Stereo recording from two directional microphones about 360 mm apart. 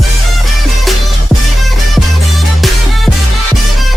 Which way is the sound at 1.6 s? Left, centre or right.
Centre.